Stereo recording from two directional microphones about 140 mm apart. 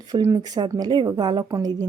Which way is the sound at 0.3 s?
30° right (ahead or behind).